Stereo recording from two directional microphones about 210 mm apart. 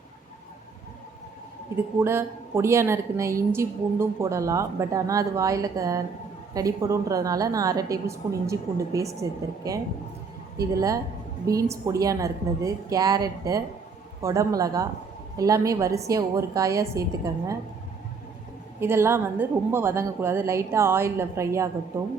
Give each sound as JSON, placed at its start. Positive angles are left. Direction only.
{"t": 1.7, "sound": "a woman's voice", "side_deg": -10}
{"t": 18.8, "sound": "a woman's voice", "side_deg": -10}